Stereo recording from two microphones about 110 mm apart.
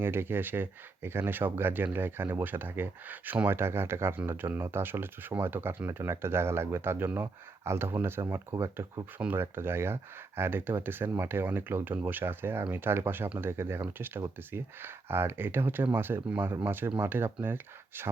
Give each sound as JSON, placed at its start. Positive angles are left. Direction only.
{"t": 0.0, "sound": "speech", "side_deg": -20}